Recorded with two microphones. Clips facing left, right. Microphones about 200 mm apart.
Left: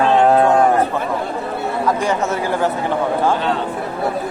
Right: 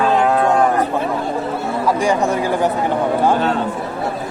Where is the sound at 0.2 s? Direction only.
30° left (ahead or behind).